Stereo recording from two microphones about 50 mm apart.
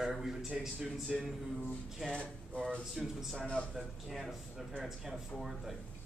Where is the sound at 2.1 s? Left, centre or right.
Centre.